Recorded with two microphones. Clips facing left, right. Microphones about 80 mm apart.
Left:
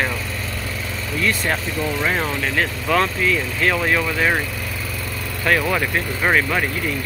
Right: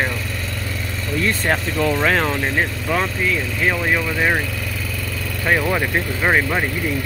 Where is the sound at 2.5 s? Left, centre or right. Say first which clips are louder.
Left 1 dB; centre.